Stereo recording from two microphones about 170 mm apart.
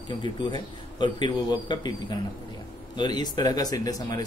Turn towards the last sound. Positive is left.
turn(degrees=20)  # may be behind; listen again after turning